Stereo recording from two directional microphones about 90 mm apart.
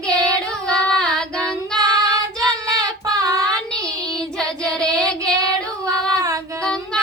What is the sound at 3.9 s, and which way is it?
Child singing, 45° right (ahead or behind).